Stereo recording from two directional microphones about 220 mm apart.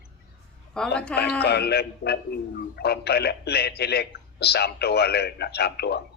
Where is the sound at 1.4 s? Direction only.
45° left (ahead or behind).